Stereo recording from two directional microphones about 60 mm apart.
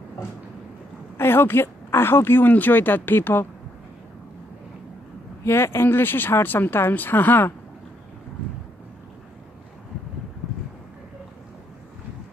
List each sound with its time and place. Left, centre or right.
1.1 s speech: left
5.4 s speech: left